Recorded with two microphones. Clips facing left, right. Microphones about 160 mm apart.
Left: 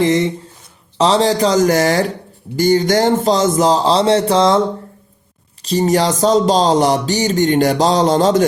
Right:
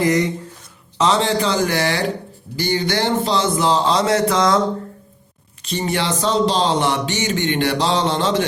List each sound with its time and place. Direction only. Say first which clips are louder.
0.0 s speech: left 3 dB; 25° left (ahead or behind)
5.6 s speech: left 7 dB; 40° left (ahead or behind)